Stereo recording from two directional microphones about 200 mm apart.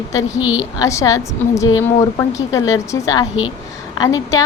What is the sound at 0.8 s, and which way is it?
A woman's voice, 15° left (ahead or behind).